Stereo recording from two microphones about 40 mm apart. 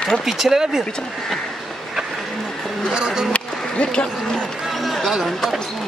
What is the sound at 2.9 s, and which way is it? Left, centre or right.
Speech, centre.